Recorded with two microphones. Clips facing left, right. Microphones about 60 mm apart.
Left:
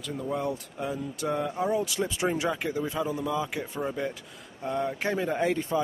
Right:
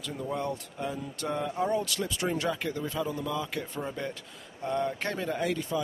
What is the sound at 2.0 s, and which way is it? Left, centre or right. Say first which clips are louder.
Speech: left 3 dB; centre.